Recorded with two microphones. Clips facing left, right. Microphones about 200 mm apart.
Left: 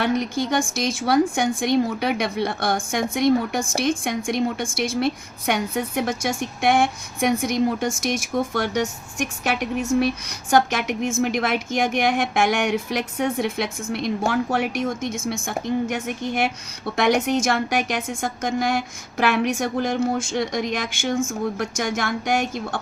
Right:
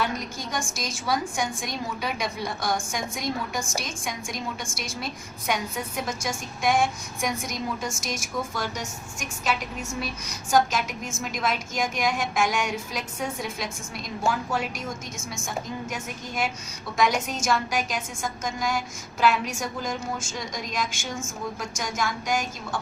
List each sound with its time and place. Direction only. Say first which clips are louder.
0.0 s a woman's voice: left 8 dB; 65° left (ahead or behind)